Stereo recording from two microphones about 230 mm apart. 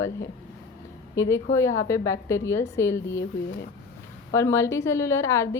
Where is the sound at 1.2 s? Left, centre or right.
Centre.